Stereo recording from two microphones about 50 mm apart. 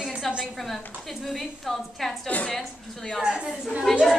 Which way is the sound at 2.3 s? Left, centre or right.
Left.